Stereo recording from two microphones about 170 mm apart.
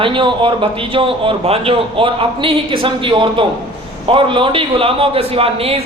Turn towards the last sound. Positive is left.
turn(degrees=-35)  # may be behind; listen again after turning